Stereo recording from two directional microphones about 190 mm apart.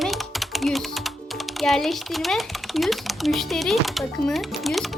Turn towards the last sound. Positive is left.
turn(degrees=0)  # may be behind; listen again after turning